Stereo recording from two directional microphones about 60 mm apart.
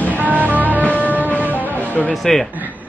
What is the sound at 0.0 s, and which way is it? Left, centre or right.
Music, left.